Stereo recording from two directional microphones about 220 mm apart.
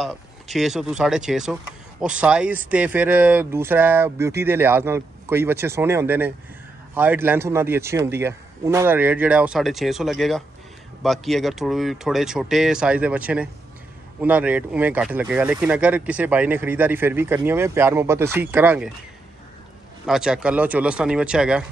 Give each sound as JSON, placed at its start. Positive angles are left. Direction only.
{"t": 0.0, "sound": "speech", "side_deg": 0}
{"t": 20.1, "sound": "speech", "side_deg": -5}